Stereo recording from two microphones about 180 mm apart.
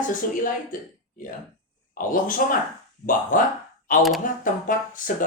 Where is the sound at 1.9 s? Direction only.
50° left (ahead or behind).